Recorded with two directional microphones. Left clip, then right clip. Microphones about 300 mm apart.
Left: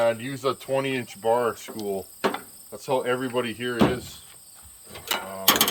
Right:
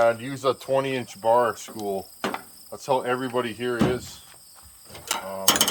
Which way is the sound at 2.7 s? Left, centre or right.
Centre.